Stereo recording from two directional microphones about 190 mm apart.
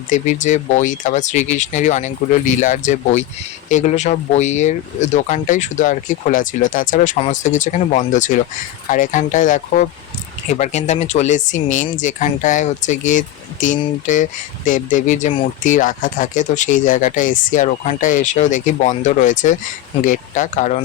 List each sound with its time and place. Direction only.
0.1 s speech: 40° left (ahead or behind)